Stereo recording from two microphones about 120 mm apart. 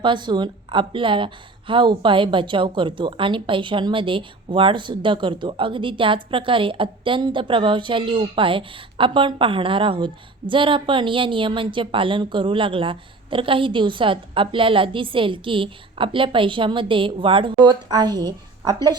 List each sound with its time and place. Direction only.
0.0 s a woman's voice: 40° right (ahead or behind)